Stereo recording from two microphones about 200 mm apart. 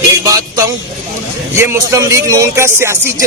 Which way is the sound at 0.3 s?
15° right (ahead or behind).